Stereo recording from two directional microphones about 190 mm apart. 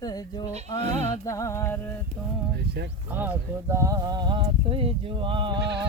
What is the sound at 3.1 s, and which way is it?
Speech, 10° right (ahead or behind).